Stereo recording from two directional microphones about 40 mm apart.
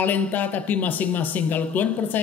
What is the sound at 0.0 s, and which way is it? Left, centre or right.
Speech, left.